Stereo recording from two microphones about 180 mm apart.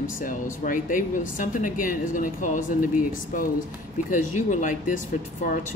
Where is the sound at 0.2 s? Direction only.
50° left (ahead or behind).